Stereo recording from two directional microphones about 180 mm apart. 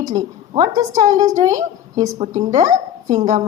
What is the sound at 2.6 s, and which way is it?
Speech, 25° right (ahead or behind).